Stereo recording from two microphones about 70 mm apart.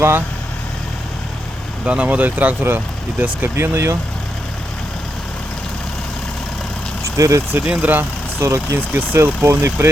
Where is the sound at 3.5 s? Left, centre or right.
Right.